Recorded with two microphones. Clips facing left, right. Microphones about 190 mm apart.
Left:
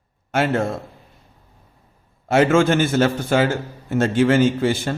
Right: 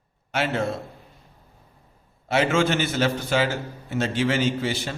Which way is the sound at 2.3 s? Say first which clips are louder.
Left 6 dB; 50° left (ahead or behind).